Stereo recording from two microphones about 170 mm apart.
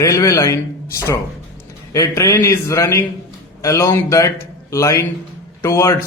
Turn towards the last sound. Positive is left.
turn(degrees=15)  # may be behind; listen again after turning